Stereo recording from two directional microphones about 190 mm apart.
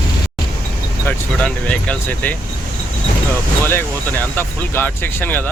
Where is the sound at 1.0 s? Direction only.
5° left (ahead or behind).